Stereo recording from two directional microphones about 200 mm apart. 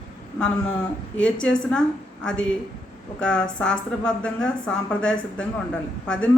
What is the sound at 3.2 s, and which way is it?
A woman's voice, 5° left (ahead or behind).